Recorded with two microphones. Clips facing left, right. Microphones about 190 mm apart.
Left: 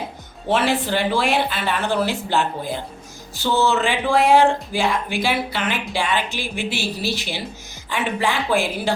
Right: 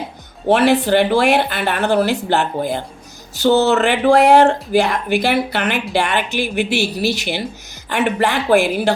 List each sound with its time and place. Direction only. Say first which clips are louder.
0.5 s speech: right 7 dB; 65° right (ahead or behind)